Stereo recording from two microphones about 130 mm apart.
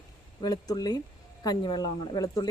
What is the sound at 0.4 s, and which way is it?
Speech, 30° left (ahead or behind).